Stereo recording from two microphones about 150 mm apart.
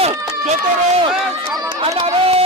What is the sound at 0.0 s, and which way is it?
Run, 45° right (ahead or behind).